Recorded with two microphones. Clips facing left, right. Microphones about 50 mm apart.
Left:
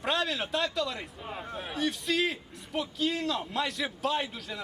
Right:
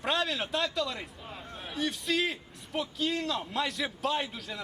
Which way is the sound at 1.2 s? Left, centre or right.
Centre.